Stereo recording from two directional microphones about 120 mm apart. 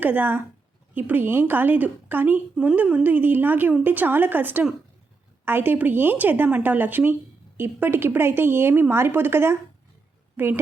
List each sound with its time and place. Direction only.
0.0 s a woman's voice: 15° right (ahead or behind)